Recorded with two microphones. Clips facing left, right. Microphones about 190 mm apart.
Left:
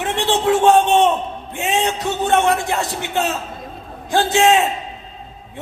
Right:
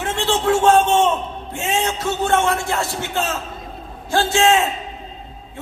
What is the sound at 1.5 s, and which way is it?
A man's voice, 20° left (ahead or behind).